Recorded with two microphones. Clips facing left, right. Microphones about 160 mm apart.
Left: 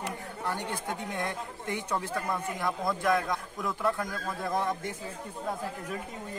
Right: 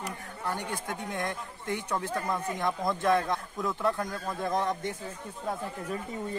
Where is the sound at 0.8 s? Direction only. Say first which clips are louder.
Even; 15° left (ahead or behind).